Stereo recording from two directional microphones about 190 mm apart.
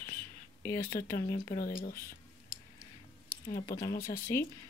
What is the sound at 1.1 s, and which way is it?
Speech, 50° left (ahead or behind).